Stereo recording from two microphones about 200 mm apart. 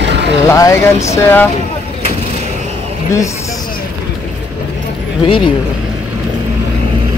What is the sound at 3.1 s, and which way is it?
Speech, 15° left (ahead or behind).